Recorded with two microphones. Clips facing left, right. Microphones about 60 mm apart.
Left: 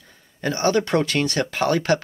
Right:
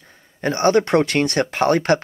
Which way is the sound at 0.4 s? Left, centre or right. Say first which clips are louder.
Right 4 dB; right.